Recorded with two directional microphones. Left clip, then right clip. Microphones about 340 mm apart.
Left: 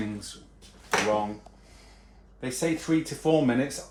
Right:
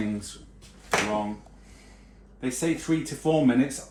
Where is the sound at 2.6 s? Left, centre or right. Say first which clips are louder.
Left 1 dB; left.